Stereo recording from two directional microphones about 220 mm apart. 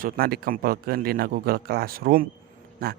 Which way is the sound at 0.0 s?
45° right (ahead or behind).